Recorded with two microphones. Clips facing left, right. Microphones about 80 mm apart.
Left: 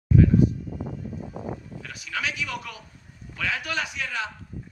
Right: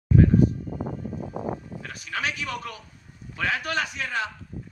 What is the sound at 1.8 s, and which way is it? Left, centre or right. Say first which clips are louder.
A man's voice: right 1 dB; right.